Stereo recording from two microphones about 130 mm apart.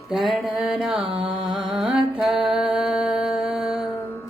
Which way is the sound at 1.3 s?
40° right (ahead or behind).